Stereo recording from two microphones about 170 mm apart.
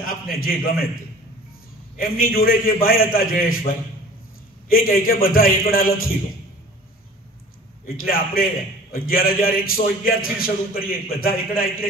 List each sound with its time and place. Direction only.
0.0 s a man's voice: 60° left (ahead or behind)
2.0 s a man's voice: 60° left (ahead or behind)
4.6 s a man's voice: 60° left (ahead or behind)
8.0 s a man's voice: 60° left (ahead or behind)